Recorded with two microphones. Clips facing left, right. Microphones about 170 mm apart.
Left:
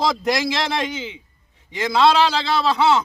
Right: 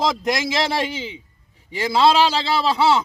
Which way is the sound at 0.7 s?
30° right (ahead or behind).